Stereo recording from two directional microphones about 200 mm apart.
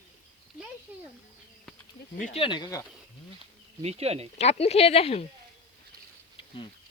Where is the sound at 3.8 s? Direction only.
30° right (ahead or behind).